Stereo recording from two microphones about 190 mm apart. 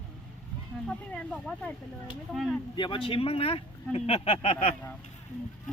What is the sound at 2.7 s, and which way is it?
Speech, 25° left (ahead or behind).